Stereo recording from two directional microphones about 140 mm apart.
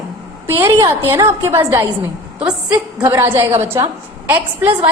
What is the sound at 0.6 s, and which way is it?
A woman's voice, 30° right (ahead or behind).